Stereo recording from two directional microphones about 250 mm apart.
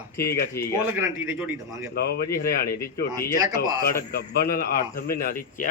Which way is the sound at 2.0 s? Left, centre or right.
Left.